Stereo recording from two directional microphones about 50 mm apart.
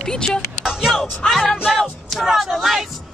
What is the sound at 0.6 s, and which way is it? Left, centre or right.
Speech, centre.